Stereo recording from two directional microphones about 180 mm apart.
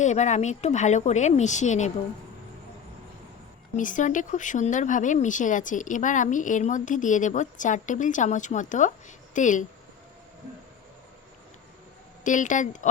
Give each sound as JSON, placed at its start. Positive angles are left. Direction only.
{"t": 0.0, "sound": "speech", "side_deg": 40}
{"t": 3.8, "sound": "speech", "side_deg": 45}
{"t": 12.2, "sound": "speech", "side_deg": 45}